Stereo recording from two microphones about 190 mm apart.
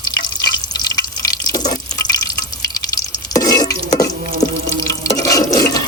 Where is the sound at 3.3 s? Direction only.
20° left (ahead or behind).